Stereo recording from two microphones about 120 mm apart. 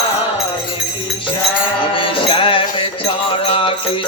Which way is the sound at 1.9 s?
45° left (ahead or behind).